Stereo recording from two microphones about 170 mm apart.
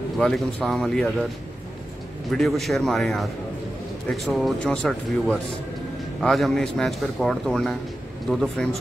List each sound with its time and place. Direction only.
0.2 s a man's voice: centre (ahead or behind)
2.3 s a man's voice: centre (ahead or behind)